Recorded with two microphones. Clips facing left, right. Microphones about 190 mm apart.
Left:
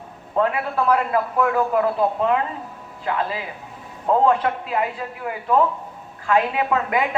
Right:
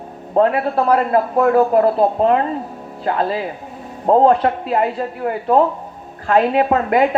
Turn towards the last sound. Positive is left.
turn(degrees=-40)  # may be behind; listen again after turning